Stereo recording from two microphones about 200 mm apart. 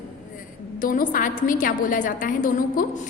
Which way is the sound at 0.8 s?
45° left (ahead or behind).